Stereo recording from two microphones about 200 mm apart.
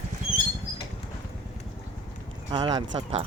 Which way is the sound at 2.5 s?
20° right (ahead or behind).